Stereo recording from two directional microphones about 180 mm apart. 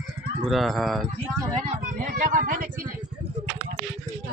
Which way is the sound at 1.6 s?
45° right (ahead or behind).